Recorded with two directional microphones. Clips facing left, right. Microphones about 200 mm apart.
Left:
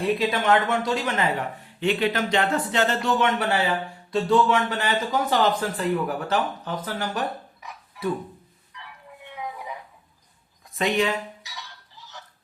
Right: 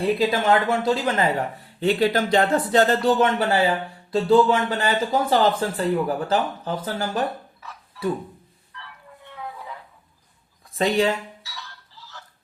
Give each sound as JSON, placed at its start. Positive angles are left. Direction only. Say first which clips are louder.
{"t": 0.0, "sound": "speech", "louder": "right 2 dB", "side_deg": -35}
{"t": 7.6, "sound": "music", "louder": "even", "side_deg": 15}
{"t": 8.7, "sound": "a sound", "louder": "even", "side_deg": 15}
{"t": 10.8, "sound": "speech", "louder": "right 3 dB", "side_deg": -30}
{"t": 11.4, "sound": "fowl", "louder": "right 1 dB", "side_deg": 20}